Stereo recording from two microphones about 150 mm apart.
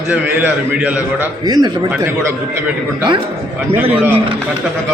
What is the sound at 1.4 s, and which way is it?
Speech, 30° right (ahead or behind).